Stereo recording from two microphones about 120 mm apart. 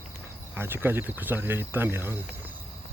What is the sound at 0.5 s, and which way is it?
Speech, 20° right (ahead or behind).